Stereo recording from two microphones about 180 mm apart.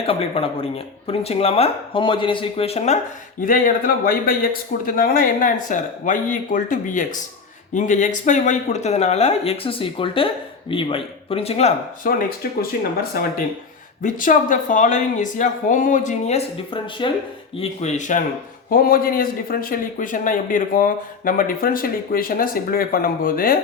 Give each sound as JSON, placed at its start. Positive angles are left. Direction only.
{"t": 0.0, "sound": "speech", "side_deg": 30}
{"t": 3.4, "sound": "a man's voice", "side_deg": 50}
{"t": 12.1, "sound": "a man's voice", "side_deg": 50}
{"t": 18.7, "sound": "a man's voice", "side_deg": 55}